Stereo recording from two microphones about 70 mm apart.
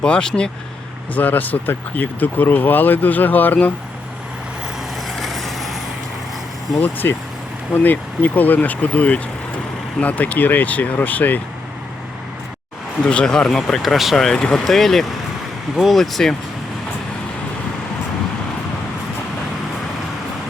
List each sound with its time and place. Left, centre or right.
0.0 s speech: centre
1.1 s speech: left
5.0 s vehicle: centre
6.7 s speech: left
13.1 s speech: centre